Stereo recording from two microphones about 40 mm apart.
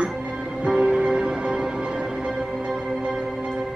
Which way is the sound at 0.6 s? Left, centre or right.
Right.